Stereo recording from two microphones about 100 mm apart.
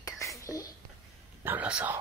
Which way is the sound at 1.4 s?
15° right (ahead or behind).